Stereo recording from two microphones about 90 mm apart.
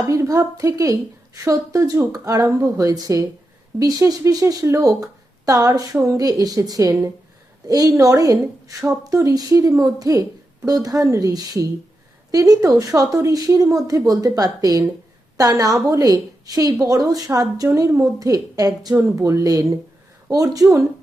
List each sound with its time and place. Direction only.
0.0 s a woman's voice: 40° right (ahead or behind)